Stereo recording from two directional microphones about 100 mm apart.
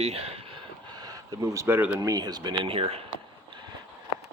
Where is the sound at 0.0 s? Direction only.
90° right.